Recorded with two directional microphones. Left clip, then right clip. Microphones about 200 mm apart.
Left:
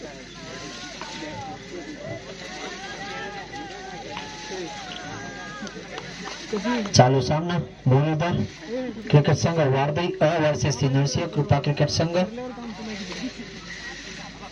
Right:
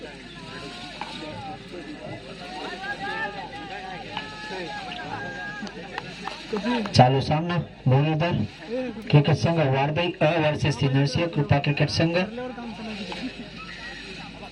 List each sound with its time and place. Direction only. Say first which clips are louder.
6.8 s a man's voice: left 1 dB; 25° left (ahead or behind)